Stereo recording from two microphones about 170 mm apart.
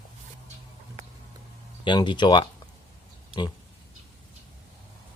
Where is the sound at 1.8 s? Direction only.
30° left (ahead or behind).